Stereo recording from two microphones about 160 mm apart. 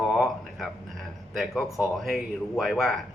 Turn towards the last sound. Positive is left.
turn(degrees=0)  # may be behind; listen again after turning